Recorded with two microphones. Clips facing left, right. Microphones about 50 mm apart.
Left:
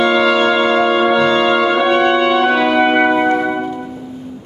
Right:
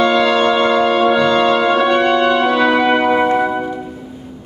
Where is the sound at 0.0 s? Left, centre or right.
Centre.